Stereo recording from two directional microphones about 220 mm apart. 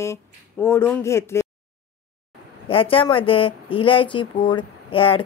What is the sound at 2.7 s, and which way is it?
Speech, 25° left (ahead or behind).